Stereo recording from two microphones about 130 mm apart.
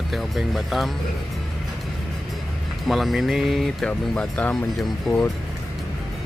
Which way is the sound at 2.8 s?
Centre (ahead or behind).